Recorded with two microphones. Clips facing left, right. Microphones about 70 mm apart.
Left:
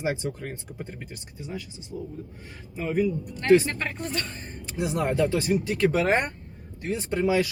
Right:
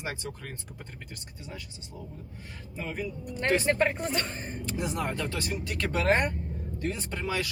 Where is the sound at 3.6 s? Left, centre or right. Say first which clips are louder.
Right 5 dB; right.